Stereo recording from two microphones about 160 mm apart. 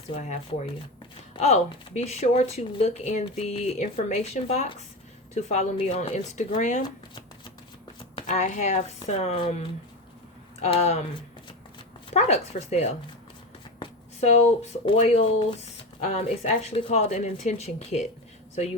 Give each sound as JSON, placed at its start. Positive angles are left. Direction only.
{"t": 1.4, "sound": "speech", "side_deg": 45}
{"t": 8.3, "sound": "speech", "side_deg": 50}
{"t": 12.1, "sound": "speech", "side_deg": 40}
{"t": 14.2, "sound": "speech", "side_deg": 40}